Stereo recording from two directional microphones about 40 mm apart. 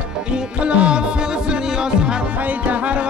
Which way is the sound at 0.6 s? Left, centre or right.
Right.